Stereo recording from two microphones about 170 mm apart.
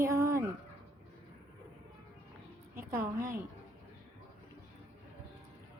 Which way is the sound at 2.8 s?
15° right (ahead or behind).